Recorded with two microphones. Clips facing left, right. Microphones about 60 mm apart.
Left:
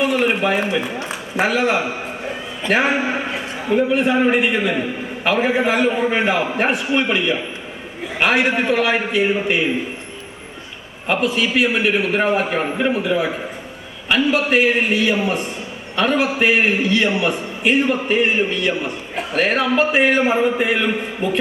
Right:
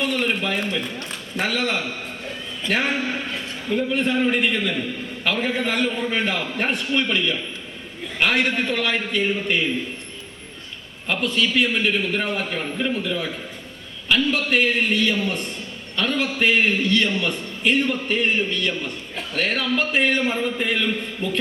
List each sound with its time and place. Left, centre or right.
0.0 s a man's voice: centre
11.1 s a man's voice: centre
13.0 s a man's voice: centre